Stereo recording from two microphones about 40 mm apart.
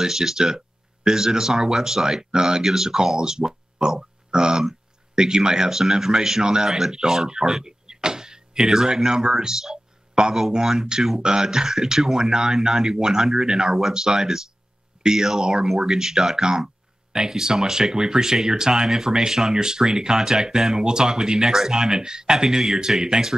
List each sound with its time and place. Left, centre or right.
0.0 s speech: centre